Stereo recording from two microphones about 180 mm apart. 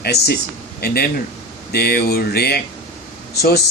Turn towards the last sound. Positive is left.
turn(degrees=65)  # may be behind; listen again after turning